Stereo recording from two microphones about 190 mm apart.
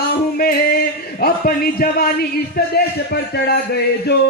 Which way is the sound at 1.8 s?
50° left (ahead or behind).